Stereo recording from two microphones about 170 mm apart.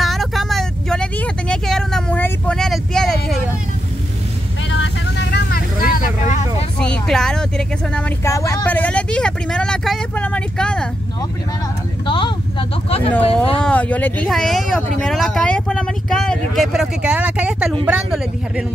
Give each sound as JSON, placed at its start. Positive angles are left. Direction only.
{"t": 0.0, "sound": "vehicle", "side_deg": 0}
{"t": 4.6, "sound": "vehicle", "side_deg": 90}
{"t": 6.8, "sound": "speech", "side_deg": 5}
{"t": 8.2, "sound": "speech", "side_deg": 15}
{"t": 12.1, "sound": "speech", "side_deg": 30}
{"t": 13.6, "sound": "a woman's voice", "side_deg": 5}